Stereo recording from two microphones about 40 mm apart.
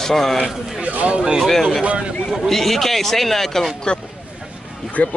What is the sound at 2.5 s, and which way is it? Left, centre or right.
Speech, centre.